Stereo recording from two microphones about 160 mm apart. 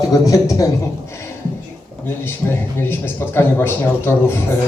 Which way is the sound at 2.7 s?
15° left (ahead or behind).